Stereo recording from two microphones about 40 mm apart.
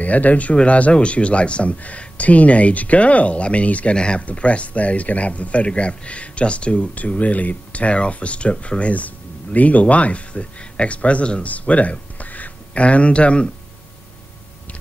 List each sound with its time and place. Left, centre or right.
0.0 s speech: left
3.9 s speech: left